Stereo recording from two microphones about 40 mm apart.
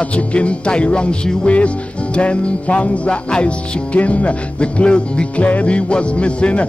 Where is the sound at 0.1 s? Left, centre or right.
Left.